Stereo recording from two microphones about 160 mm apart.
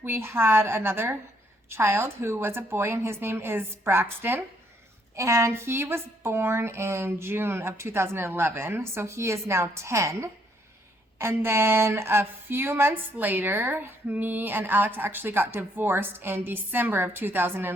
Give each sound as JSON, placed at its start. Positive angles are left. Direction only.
{"t": 0.0, "sound": "speech", "side_deg": -15}